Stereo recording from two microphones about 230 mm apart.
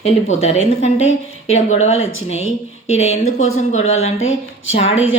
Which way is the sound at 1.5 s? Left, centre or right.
Left.